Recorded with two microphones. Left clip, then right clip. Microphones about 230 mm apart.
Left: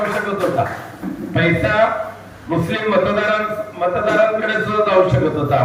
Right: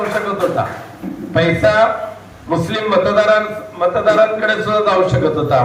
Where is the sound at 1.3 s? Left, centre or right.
Right.